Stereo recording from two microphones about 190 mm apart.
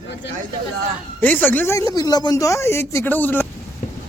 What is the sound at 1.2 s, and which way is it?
Speech, 10° left (ahead or behind).